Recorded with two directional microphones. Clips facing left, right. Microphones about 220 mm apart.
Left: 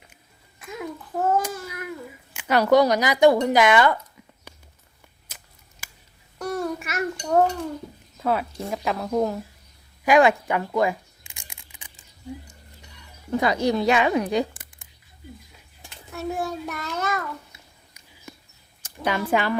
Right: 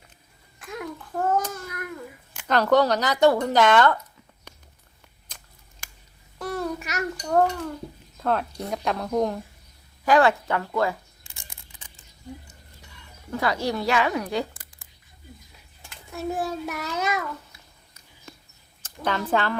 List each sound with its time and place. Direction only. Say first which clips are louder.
0.6 s child singing: left 1 dB; 5° left (ahead or behind)
2.3 s speech: left 2 dB; 10° left (ahead or behind)
5.3 s scissors: even; 5° left (ahead or behind)
6.4 s babbling: left 2 dB; centre (ahead or behind)
8.2 s speech: left 1 dB; 5° left (ahead or behind)
10.1 s speech: left 2 dB; 15° left (ahead or behind)
11.3 s a sound: left 1 dB; 15° left (ahead or behind)
13.3 s speech: left 4 dB; 20° left (ahead or behind)
16.1 s a child's voice: even; 5° right (ahead or behind)
18.8 s speech: left 2 dB; 10° left (ahead or behind)